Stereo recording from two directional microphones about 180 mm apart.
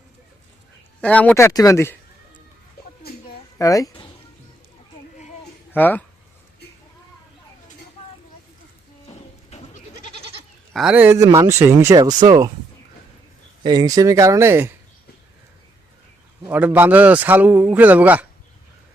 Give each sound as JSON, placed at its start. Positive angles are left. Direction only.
{"t": 1.0, "sound": "speech", "side_deg": 5}
{"t": 3.6, "sound": "speech", "side_deg": 20}
{"t": 5.7, "sound": "speech", "side_deg": 10}
{"t": 9.5, "sound": "goat", "side_deg": 35}
{"t": 10.8, "sound": "a man's voice", "side_deg": -5}
{"t": 13.6, "sound": "speech", "side_deg": -25}
{"t": 16.5, "sound": "a man's voice", "side_deg": -10}